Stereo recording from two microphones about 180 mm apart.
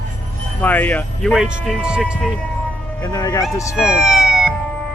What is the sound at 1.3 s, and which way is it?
Speech, 5° right (ahead or behind).